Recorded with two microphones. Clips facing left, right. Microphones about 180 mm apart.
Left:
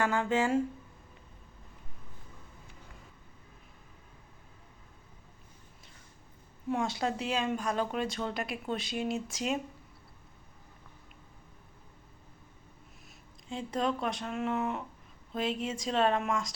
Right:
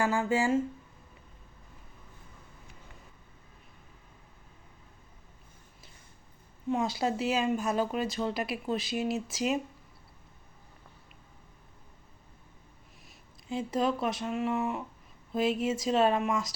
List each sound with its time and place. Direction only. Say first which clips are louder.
0.0 s speech: right 1 dB; 10° right (ahead or behind)
6.7 s speech: right 2 dB; centre (ahead or behind)
13.5 s speech: right 3 dB; 5° right (ahead or behind)